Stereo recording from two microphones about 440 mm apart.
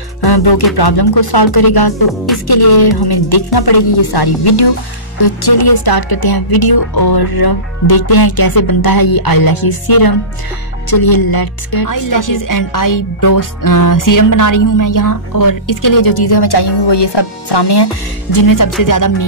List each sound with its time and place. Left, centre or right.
0.2 s music: left
0.7 s speech: left
18.3 s speech: left